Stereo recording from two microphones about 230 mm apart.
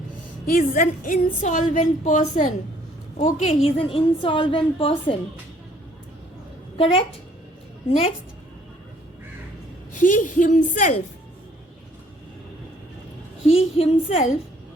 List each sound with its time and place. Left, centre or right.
0.4 s a woman's voice: left
6.7 s a woman's voice: left
10.0 s a woman's voice: left
13.5 s a woman's voice: left